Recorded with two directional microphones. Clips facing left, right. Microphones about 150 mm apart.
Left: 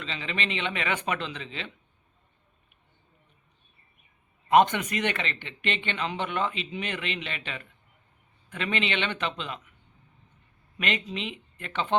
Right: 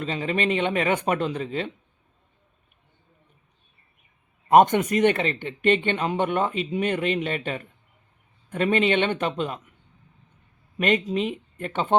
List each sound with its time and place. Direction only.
0.0 s speech: 45° right (ahead or behind)
4.4 s speech: 45° right (ahead or behind)
10.8 s speech: 45° right (ahead or behind)